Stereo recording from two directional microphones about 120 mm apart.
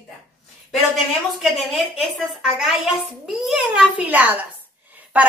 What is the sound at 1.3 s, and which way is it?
A woman's voice, centre (ahead or behind).